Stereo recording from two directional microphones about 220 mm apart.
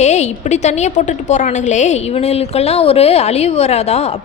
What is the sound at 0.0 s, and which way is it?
A woman's voice, 30° left (ahead or behind).